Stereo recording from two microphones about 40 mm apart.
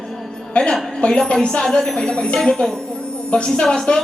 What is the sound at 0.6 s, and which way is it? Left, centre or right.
Speech, left.